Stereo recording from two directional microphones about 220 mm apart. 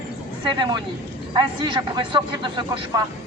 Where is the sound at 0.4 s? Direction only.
20° right (ahead or behind).